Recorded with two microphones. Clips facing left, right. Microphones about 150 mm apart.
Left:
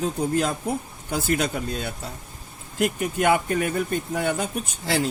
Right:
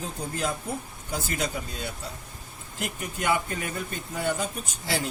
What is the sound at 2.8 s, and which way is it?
Speech, 55° left (ahead or behind).